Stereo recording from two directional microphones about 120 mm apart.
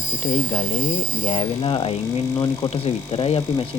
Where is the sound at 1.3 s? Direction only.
50° left (ahead or behind).